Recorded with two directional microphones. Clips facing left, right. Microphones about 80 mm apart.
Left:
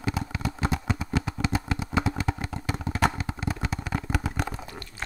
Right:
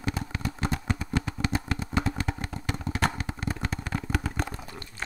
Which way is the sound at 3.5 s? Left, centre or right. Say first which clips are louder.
Left 2 dB; centre.